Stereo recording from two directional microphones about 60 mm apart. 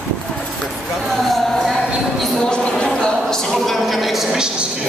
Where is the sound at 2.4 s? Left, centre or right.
Centre.